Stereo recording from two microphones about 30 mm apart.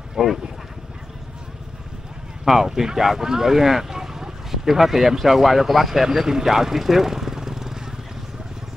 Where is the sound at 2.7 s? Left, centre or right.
Centre.